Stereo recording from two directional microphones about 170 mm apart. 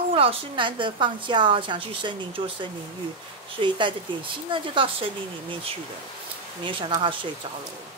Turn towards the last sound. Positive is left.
turn(degrees=-30)  # may be behind; listen again after turning